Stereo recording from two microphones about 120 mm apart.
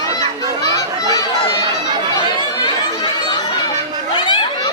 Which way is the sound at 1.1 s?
30° left (ahead or behind).